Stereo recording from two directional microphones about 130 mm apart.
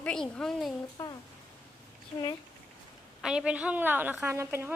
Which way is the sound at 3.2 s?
5° right (ahead or behind).